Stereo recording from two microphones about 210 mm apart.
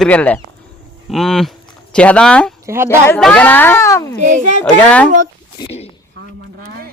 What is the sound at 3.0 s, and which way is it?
Speech, 5° left (ahead or behind).